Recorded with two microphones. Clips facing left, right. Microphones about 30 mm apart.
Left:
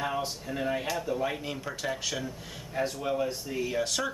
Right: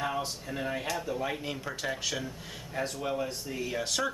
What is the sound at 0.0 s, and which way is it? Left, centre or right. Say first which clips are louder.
Speech: left 1 dB; centre.